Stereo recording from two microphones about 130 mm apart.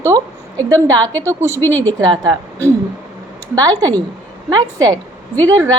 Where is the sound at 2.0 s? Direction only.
35° right (ahead or behind).